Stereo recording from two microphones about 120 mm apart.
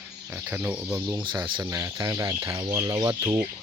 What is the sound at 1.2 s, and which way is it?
Speech, 40° right (ahead or behind).